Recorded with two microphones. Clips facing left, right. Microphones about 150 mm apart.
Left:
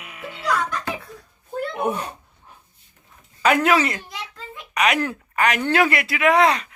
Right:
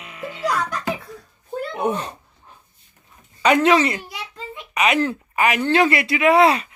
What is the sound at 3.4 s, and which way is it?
Speech, 5° left (ahead or behind).